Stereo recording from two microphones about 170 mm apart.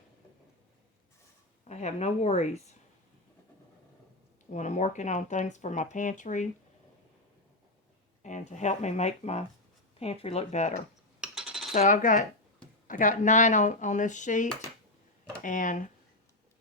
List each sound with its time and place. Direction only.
1.6 s a woman's voice: 40° left (ahead or behind)
4.5 s speech: 45° left (ahead or behind)
8.2 s a woman's voice: 45° left (ahead or behind)
11.2 s coin: 5° right (ahead or behind)
11.9 s speech: 50° left (ahead or behind)